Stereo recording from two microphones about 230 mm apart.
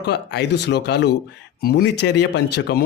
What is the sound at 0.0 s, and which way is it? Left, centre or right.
A man's voice, left.